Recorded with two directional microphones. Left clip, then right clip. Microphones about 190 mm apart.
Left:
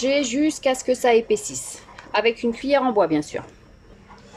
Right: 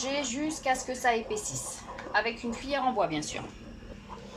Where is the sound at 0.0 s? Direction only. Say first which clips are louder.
Left 11 dB; 55° left (ahead or behind).